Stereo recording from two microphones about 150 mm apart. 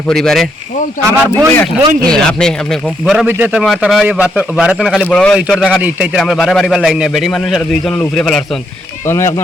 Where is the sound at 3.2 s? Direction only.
10° right (ahead or behind).